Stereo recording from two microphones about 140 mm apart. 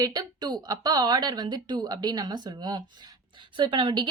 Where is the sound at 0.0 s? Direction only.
25° right (ahead or behind).